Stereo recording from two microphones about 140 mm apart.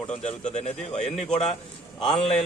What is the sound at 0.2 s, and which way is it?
Speech, 55° left (ahead or behind).